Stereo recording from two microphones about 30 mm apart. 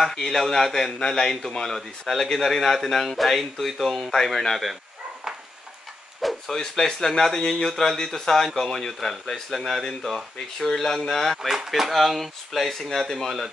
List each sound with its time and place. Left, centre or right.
0.0 s speech: centre
6.5 s speech: centre
7.6 s speech: centre
11.4 s speech: centre